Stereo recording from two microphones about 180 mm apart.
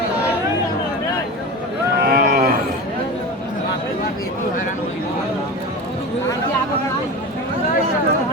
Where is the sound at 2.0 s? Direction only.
55° right (ahead or behind).